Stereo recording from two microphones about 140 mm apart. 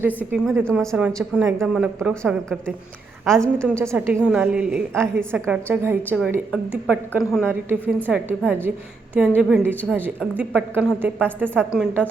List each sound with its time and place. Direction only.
0.6 s a woman's voice: 5° left (ahead or behind)
0.9 s a woman's voice: 10° right (ahead or behind)
3.2 s a woman's voice: 5° left (ahead or behind)
3.8 s a woman's voice: 15° right (ahead or behind)